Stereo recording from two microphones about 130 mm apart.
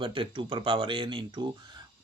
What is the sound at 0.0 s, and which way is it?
Speech, 40° right (ahead or behind).